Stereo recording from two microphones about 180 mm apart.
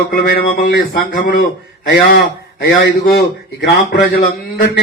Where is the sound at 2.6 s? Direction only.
65° left (ahead or behind).